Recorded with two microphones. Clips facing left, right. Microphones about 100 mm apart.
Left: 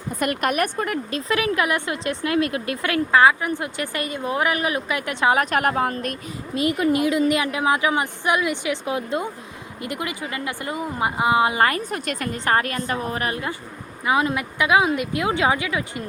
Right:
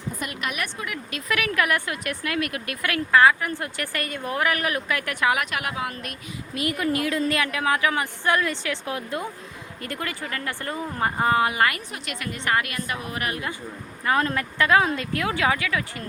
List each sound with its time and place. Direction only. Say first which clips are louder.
0.2 s a woman's voice: left 11 dB; 50° left (ahead or behind)
1.1 s a woman's voice: left 1 dB; 25° left (ahead or behind)
6.5 s a woman's voice: left 5 dB; 25° left (ahead or behind)
11.4 s a woman's voice: left 3 dB; 30° left (ahead or behind)
11.9 s a woman's voice: left 6 dB; 45° left (ahead or behind); by 13.5 s 30° left (ahead or behind)
14.0 s speech: left 2 dB; 15° left (ahead or behind)